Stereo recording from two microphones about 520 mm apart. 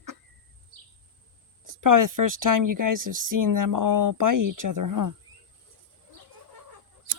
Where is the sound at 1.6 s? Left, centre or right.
Right.